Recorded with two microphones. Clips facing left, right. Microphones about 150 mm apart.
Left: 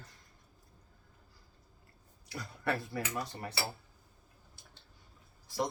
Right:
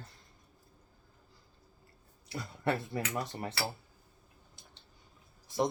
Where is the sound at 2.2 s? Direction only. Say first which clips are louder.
Right 2 dB; 25° right (ahead or behind).